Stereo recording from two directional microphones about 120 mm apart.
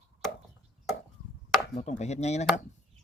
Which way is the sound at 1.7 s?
80° left.